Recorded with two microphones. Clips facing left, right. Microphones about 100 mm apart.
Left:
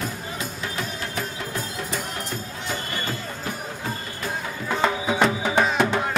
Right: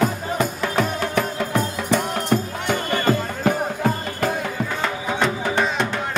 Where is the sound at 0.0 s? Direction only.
60° right (ahead or behind).